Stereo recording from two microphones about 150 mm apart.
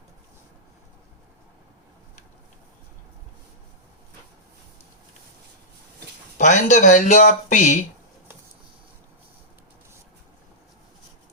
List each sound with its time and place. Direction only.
6.3 s speech: 55° left (ahead or behind)